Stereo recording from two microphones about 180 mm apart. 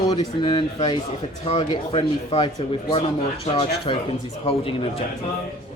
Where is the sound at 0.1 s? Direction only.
25° left (ahead or behind).